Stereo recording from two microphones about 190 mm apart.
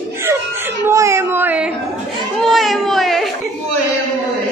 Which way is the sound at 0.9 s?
15° right (ahead or behind).